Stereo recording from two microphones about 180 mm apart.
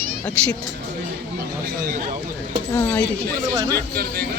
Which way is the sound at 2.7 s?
10° left (ahead or behind).